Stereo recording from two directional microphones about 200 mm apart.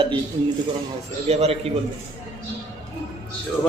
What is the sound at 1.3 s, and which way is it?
Speech, 30° right (ahead or behind).